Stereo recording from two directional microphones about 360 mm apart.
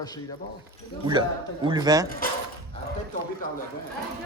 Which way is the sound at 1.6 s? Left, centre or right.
Centre.